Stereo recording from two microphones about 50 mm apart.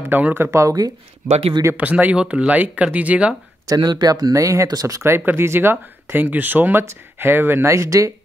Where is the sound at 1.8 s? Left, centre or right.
Right.